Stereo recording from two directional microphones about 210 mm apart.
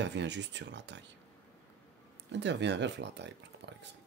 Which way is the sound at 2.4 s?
55° right (ahead or behind).